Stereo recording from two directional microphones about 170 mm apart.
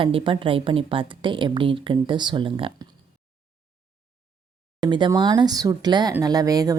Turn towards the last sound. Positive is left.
turn(degrees=-20)  # may be behind; listen again after turning